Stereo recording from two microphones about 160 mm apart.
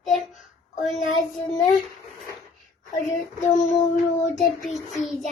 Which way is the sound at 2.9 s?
50° left (ahead or behind).